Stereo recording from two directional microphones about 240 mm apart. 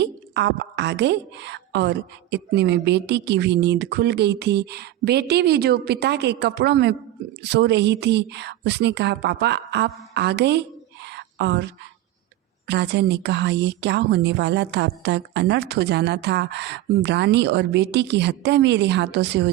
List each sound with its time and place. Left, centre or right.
0.0 s a woman's voice: right
11.0 s a sound: right
12.6 s a woman's voice: right